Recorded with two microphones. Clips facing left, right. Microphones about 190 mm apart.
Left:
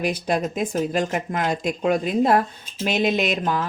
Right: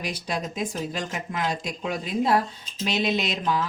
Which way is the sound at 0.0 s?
55° left (ahead or behind).